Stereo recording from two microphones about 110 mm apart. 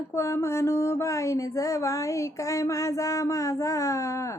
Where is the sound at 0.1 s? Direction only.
25° left (ahead or behind).